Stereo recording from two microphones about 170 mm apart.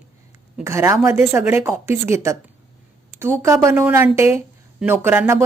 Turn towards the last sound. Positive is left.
turn(degrees=-15)  # may be behind; listen again after turning